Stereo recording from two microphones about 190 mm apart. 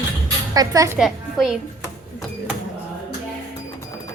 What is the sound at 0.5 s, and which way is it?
Speech, 20° right (ahead or behind).